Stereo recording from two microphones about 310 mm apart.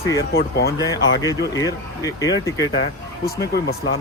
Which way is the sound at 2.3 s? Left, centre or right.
Left.